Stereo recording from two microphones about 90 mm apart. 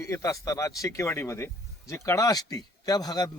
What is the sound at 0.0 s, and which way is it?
A man's voice, 35° left (ahead or behind).